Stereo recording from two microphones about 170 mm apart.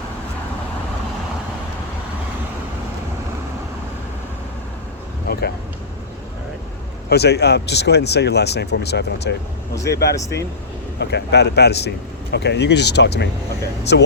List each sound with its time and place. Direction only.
5.3 s a sound: 70° left (ahead or behind)
7.1 s speech: 75° left (ahead or behind)
13.9 s speech: 90° left